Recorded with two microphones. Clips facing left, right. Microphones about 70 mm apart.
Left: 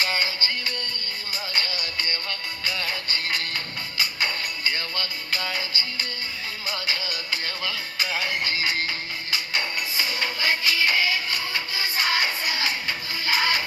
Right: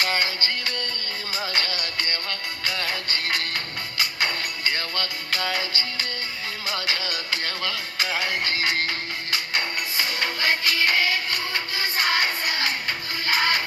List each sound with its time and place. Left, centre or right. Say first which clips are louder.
0.0 s music: right 1 dB; right
1.5 s music: right 1 dB; right
6.7 s music: right 2 dB; right